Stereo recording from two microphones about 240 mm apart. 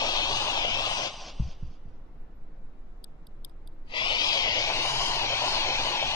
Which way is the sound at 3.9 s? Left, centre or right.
Centre.